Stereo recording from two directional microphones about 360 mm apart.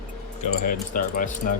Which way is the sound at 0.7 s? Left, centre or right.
Left.